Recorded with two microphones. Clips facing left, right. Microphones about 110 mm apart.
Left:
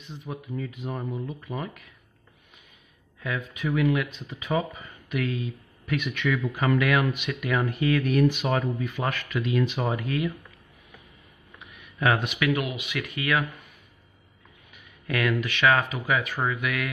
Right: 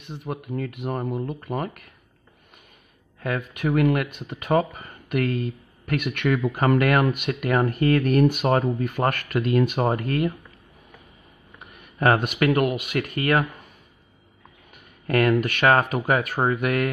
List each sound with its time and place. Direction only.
0.0 s speech: 60° right (ahead or behind)
3.2 s speech: 55° right (ahead or behind)
11.6 s speech: 50° right (ahead or behind)
15.0 s speech: 45° right (ahead or behind)